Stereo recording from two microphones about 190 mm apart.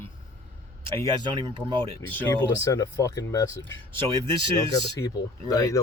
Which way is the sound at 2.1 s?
15° left (ahead or behind).